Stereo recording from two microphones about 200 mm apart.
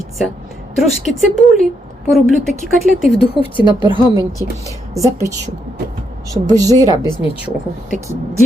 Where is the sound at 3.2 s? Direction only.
25° left (ahead or behind).